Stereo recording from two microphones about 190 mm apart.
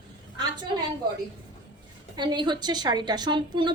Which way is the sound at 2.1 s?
25° right (ahead or behind).